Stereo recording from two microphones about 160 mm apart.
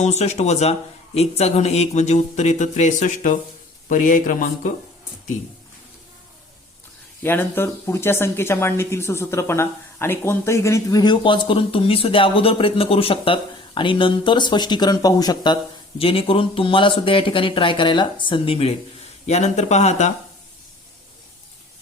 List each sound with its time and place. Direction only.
0.0 s speech: 45° left (ahead or behind)
7.2 s speech: 15° left (ahead or behind)
16.0 s speech: 35° left (ahead or behind)